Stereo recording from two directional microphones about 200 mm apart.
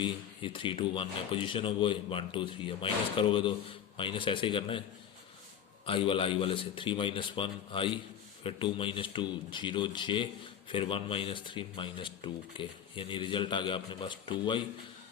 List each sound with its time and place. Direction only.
0.0 s speech: 25° left (ahead or behind)
5.8 s speech: 25° left (ahead or behind)